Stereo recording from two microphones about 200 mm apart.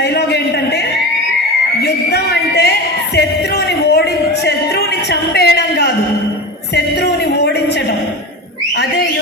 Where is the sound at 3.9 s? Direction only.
55° left (ahead or behind).